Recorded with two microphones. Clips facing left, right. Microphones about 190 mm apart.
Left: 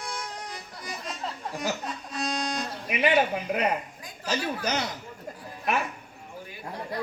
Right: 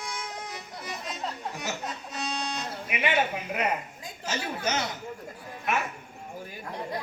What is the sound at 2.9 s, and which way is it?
A man's voice, 35° left (ahead or behind).